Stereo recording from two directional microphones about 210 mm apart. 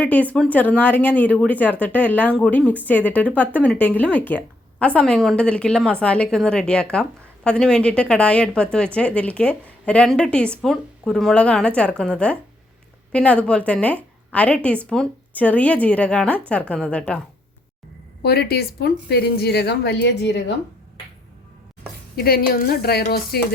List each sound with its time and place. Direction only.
0.0 s a woman's voice: 5° left (ahead or behind)
18.2 s a woman's voice: 50° left (ahead or behind)
22.1 s a woman's voice: 45° left (ahead or behind)